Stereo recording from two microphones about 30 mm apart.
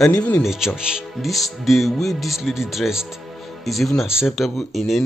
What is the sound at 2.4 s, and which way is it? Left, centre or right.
Speech, centre.